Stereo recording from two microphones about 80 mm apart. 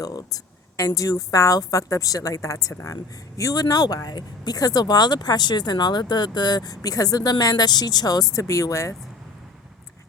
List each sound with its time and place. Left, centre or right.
0.0 s a woman's voice: left